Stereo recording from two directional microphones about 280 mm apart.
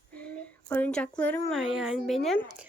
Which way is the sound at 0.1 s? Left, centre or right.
Centre.